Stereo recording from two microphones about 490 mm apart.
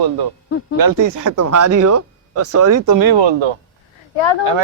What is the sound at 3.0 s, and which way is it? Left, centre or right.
Speech, right.